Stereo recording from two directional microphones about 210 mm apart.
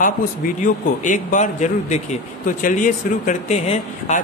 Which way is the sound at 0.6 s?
40° left (ahead or behind).